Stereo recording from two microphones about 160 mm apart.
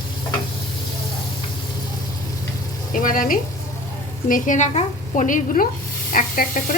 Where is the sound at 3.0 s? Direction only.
55° left (ahead or behind).